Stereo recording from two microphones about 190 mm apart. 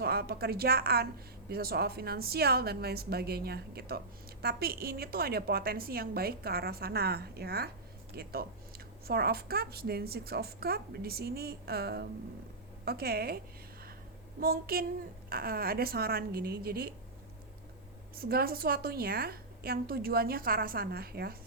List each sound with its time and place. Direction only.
0.0 s a woman's voice: 55° right (ahead or behind)
18.2 s a woman's voice: 55° right (ahead or behind)